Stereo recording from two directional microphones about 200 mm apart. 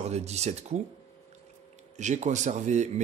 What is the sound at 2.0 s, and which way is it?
Speech, 35° right (ahead or behind).